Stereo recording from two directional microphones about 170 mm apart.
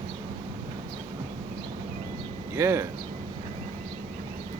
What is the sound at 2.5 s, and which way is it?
Speech, 15° right (ahead or behind).